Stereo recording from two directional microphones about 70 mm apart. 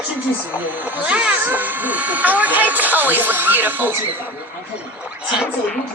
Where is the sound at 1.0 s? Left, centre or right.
Centre.